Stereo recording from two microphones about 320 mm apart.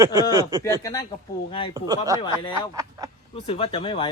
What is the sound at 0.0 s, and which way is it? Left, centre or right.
Speech, centre.